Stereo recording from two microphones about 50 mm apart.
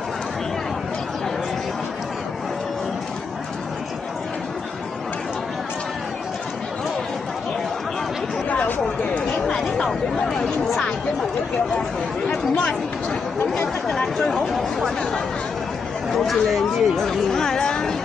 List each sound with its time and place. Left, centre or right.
8.5 s a sound: left
9.5 s chatter: centre
13.8 s speech: centre
16.2 s speech: centre